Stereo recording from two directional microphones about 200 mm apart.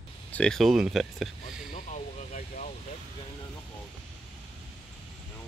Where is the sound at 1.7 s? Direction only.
35° left (ahead or behind).